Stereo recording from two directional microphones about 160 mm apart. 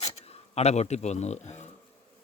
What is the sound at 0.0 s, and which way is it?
Speech, 40° left (ahead or behind).